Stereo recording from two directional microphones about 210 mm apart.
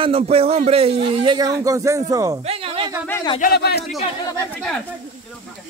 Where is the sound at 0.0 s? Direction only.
25° right (ahead or behind).